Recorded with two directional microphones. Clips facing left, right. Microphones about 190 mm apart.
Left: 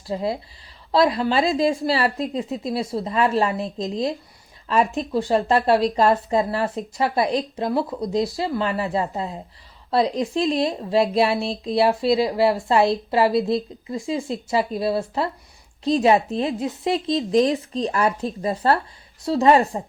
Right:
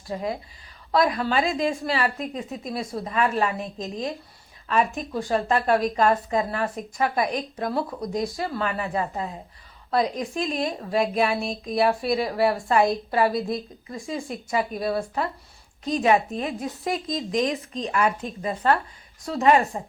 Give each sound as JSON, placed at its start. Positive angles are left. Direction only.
{"t": 0.1, "sound": "a woman's voice", "side_deg": 30}